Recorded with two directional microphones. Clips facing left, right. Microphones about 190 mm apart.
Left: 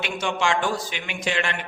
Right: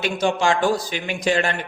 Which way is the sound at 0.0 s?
35° right (ahead or behind).